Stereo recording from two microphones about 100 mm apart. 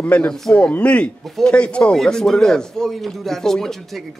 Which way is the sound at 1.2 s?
Centre (ahead or behind).